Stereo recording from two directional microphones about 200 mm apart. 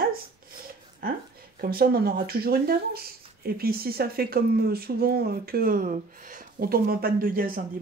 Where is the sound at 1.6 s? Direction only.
50° right (ahead or behind).